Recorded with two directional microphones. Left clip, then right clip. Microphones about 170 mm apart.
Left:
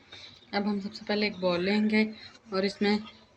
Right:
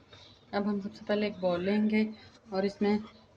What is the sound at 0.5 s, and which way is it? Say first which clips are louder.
Speech: left 2 dB; 10° right (ahead or behind).